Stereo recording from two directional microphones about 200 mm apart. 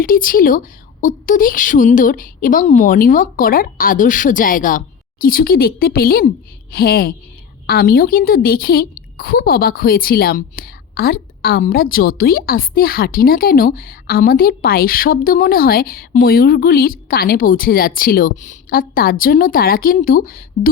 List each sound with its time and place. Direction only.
0.0 s a woman's voice: 45° left (ahead or behind)